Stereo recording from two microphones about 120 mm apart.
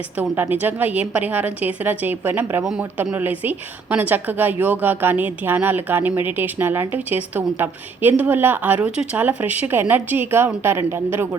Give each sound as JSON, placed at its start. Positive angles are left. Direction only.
{"t": 0.2, "sound": "a woman's voice", "side_deg": -15}